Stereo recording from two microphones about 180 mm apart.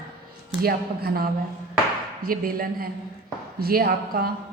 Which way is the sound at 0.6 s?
55° right (ahead or behind).